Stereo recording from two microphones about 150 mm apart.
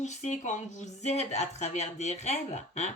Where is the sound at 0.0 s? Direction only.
50° left (ahead or behind).